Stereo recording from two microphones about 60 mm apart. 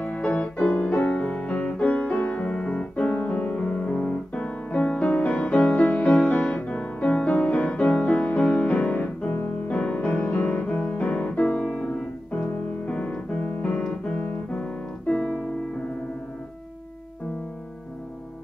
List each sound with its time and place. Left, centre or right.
0.0 s music: centre
13.8 s piano: centre